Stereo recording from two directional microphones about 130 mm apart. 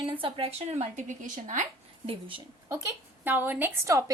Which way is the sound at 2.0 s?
40° right (ahead or behind).